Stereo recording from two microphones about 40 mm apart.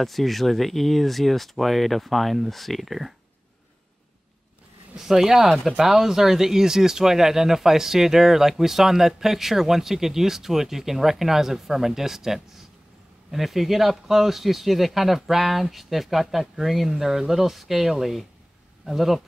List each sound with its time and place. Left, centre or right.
0.0 s speech: centre
4.9 s speech: centre